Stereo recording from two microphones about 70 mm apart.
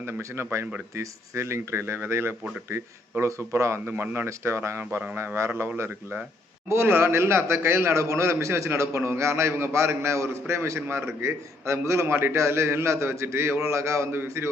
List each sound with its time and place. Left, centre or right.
0.1 s a man's voice: right
3.8 s a man's voice: right